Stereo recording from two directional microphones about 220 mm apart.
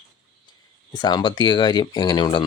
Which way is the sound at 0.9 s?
20° left (ahead or behind).